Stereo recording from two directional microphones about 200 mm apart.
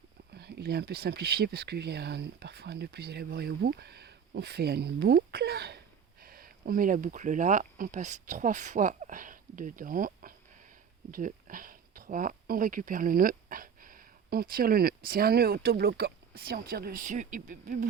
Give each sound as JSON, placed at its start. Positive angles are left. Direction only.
{"t": 0.3, "sound": "speech", "side_deg": -55}